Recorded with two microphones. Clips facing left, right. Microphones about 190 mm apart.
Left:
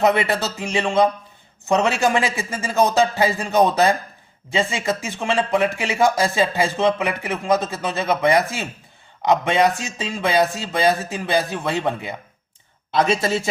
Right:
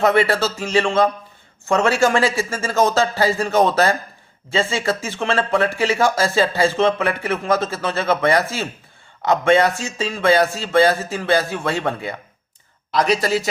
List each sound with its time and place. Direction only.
0.0 s speech: 20° left (ahead or behind)